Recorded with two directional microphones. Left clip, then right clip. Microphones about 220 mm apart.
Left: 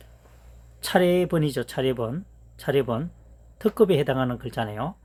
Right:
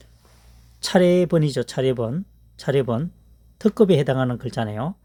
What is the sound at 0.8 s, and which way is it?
Speech, 45° right (ahead or behind).